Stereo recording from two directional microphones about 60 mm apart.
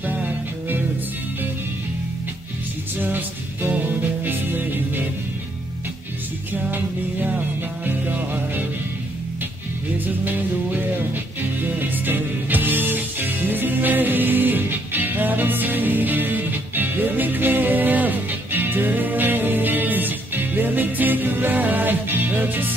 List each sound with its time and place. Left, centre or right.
0.0 s music: right
3.0 s music: right
6.5 s music: right
10.0 s music: right